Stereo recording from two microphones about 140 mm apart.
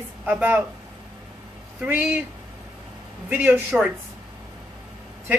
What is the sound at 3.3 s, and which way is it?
Speech, 15° right (ahead or behind).